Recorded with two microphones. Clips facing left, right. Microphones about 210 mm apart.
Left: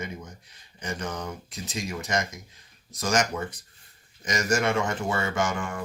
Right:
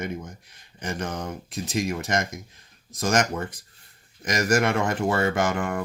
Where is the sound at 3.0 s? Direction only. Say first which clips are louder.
Right 2 dB; 55° right (ahead or behind).